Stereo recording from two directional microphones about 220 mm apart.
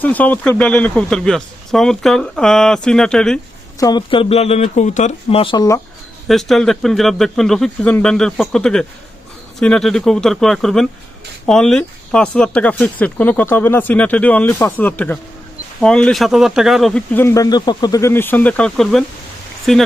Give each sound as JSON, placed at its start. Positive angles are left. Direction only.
{"t": 0.0, "sound": "a man's voice", "side_deg": 5}
{"t": 3.8, "sound": "speech", "side_deg": 20}
{"t": 6.2, "sound": "a man's voice", "side_deg": 0}